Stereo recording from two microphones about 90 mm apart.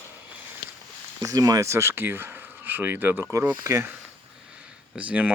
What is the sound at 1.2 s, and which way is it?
Speech, 45° right (ahead or behind).